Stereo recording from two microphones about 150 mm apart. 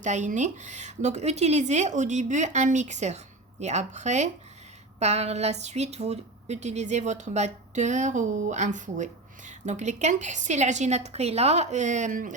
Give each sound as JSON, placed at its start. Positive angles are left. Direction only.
{"t": 0.0, "sound": "speech", "side_deg": -55}